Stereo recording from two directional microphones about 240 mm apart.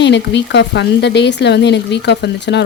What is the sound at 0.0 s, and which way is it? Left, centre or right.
Speech, left.